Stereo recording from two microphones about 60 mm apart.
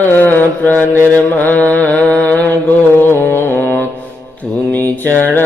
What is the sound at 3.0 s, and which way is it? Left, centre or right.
Music, left.